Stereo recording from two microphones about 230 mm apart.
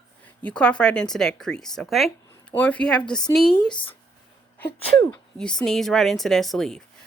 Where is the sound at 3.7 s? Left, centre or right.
Left.